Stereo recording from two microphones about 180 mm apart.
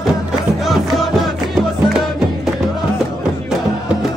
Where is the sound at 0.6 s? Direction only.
Centre (ahead or behind).